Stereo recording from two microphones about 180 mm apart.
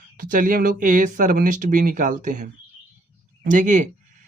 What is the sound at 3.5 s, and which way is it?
Speech, 45° right (ahead or behind).